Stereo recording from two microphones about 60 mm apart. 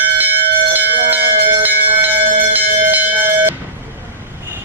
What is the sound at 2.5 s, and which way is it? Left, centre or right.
Bell, right.